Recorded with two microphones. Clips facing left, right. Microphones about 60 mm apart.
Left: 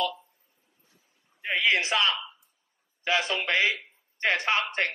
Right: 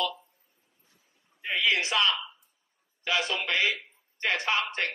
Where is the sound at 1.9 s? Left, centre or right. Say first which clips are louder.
Left 1 dB; left.